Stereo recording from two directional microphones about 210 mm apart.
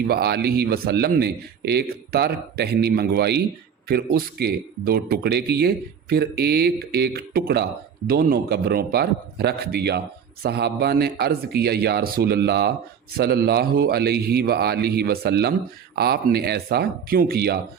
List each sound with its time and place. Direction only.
0.1 s speech: 50° right (ahead or behind)